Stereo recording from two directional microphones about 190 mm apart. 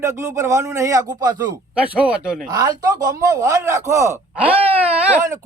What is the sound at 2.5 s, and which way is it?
Speech, 20° right (ahead or behind).